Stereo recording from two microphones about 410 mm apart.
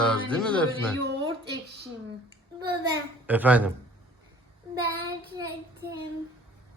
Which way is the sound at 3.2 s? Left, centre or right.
Centre.